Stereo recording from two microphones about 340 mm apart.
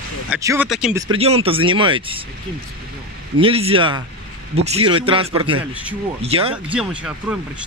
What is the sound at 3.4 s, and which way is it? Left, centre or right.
Speech, centre.